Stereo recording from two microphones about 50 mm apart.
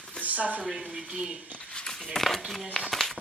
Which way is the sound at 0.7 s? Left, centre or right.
Centre.